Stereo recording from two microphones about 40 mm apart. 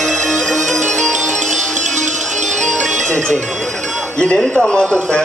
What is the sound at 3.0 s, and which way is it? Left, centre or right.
Music, left.